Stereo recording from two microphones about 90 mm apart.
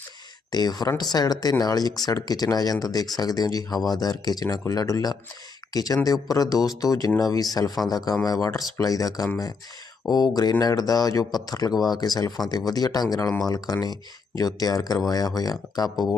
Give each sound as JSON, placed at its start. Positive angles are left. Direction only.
{"t": 0.5, "sound": "speech", "side_deg": 50}